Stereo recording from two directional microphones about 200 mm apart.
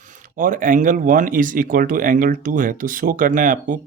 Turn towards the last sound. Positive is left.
turn(degrees=-40)  # may be behind; listen again after turning